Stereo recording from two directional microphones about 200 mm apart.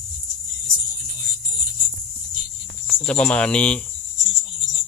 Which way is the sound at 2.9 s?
5° left (ahead or behind).